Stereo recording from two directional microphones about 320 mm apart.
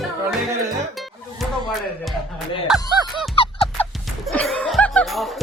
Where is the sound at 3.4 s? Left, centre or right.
Centre.